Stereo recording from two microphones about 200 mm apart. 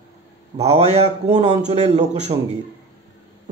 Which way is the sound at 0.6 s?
30° right (ahead or behind).